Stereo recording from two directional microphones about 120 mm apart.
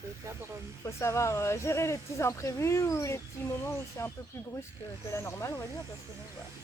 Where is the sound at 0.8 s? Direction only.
25° left (ahead or behind).